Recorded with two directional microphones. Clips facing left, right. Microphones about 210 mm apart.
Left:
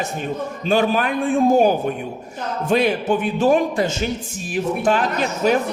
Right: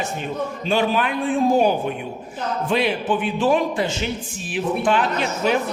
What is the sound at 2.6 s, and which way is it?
A man's voice, 45° left (ahead or behind).